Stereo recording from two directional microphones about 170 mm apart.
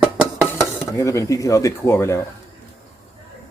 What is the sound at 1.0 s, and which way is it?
Speech, 20° left (ahead or behind).